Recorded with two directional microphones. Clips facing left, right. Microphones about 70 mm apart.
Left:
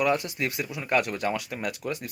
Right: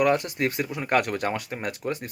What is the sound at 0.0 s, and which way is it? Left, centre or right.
Speech, right.